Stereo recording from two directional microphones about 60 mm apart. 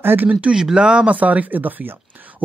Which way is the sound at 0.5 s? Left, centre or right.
Centre.